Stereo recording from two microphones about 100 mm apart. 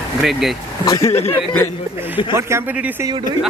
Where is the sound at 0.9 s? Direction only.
35° left (ahead or behind).